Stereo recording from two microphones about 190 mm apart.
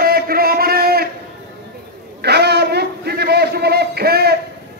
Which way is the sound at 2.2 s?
60° right (ahead or behind).